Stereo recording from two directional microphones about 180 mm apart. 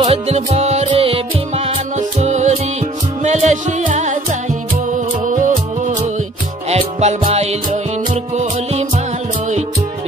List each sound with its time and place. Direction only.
0.0 s music: 35° right (ahead or behind)